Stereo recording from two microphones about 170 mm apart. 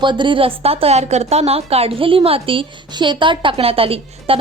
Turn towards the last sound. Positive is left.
turn(degrees=-35)  # may be behind; listen again after turning